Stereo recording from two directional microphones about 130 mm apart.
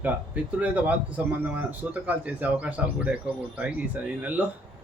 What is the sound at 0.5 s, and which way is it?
Speech, 10° right (ahead or behind).